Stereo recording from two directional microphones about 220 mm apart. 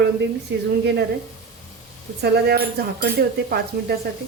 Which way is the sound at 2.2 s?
45° right (ahead or behind).